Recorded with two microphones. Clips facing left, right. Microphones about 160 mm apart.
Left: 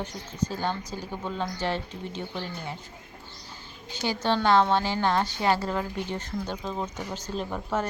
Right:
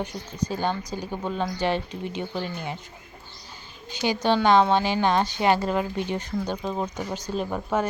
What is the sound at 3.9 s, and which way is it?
Speech, 15° right (ahead or behind).